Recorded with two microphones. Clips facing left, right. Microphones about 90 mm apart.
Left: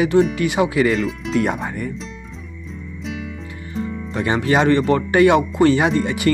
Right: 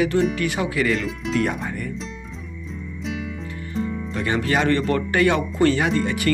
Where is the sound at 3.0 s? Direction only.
Centre (ahead or behind).